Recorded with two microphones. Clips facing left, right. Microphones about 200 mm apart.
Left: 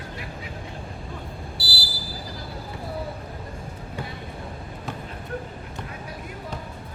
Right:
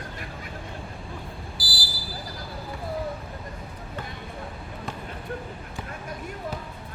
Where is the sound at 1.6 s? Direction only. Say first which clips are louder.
Left 2 dB; 25° left (ahead or behind).